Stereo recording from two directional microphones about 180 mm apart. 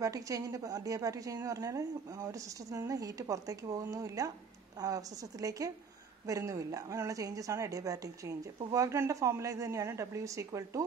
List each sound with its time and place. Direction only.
0.0 s a woman's voice: 20° right (ahead or behind)